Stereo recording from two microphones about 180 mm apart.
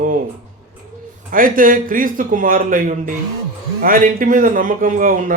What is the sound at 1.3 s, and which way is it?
Speech, 50° right (ahead or behind).